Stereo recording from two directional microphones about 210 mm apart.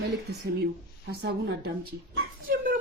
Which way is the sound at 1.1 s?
50° right (ahead or behind).